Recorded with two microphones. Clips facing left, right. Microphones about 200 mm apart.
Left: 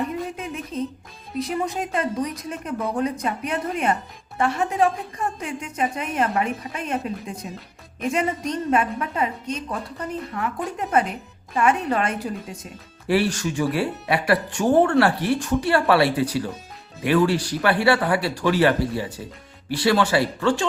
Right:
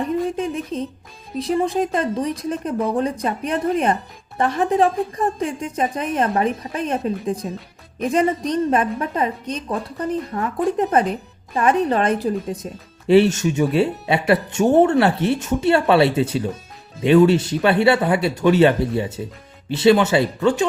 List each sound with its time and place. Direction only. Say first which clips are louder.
0.3 s a sound: right 5 dB; 30° right (ahead or behind)
1.4 s speech: right 6 dB; 30° right (ahead or behind)
13.1 s speech: right 7 dB; 25° right (ahead or behind)